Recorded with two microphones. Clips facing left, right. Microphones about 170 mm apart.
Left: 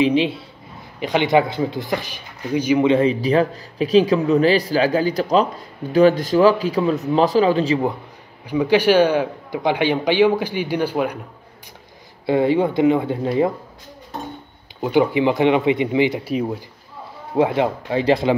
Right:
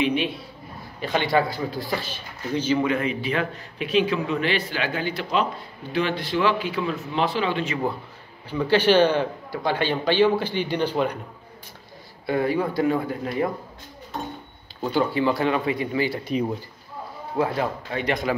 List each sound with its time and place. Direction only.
0.0 s speech: 30° left (ahead or behind)
0.9 s a man's voice: 15° left (ahead or behind)
2.9 s speech: 30° left (ahead or behind)
8.5 s a man's voice: 10° left (ahead or behind)
12.3 s speech: 25° left (ahead or behind)
14.8 s speech: 15° left (ahead or behind)
16.3 s a man's voice: 5° left (ahead or behind)
17.4 s speech: 20° left (ahead or behind)